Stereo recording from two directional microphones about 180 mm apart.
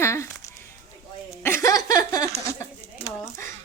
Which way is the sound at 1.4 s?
15° left (ahead or behind).